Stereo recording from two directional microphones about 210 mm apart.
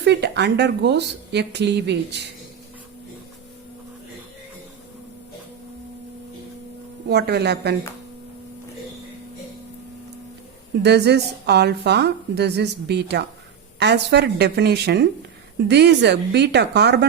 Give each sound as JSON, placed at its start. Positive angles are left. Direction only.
{"t": 0.0, "sound": "speech", "side_deg": -55}
{"t": 7.1, "sound": "a woman's voice", "side_deg": -50}
{"t": 10.8, "sound": "a woman's voice", "side_deg": -55}